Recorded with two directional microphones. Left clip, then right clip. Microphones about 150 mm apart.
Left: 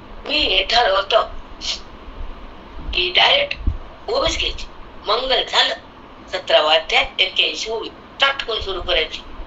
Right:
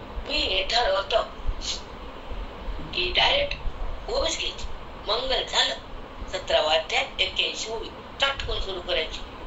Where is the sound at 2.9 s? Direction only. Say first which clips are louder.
Left 7 dB; 45° left (ahead or behind).